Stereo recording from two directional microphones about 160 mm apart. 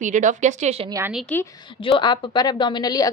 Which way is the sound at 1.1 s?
Centre (ahead or behind).